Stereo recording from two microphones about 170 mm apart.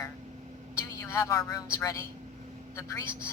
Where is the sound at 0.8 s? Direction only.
15° left (ahead or behind).